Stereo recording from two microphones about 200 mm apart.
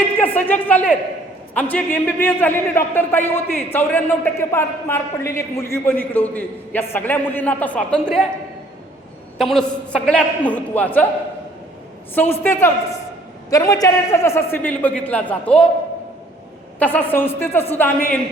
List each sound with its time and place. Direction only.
0.3 s a man's voice: 10° left (ahead or behind)
9.4 s a man's voice: centre (ahead or behind)
12.1 s a man's voice: 10° left (ahead or behind)
16.8 s a man's voice: 10° left (ahead or behind)